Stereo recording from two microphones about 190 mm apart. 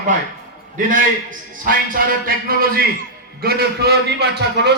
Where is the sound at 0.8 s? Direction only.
45° right (ahead or behind).